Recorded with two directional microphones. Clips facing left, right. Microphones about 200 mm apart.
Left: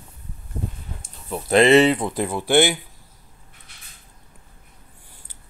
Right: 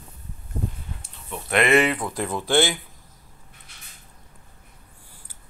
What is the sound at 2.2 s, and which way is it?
Speech, 15° left (ahead or behind).